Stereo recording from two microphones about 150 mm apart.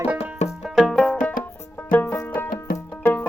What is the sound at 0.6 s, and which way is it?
Music, centre (ahead or behind).